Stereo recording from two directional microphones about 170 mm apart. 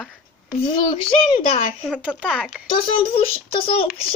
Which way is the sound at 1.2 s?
30° left (ahead or behind).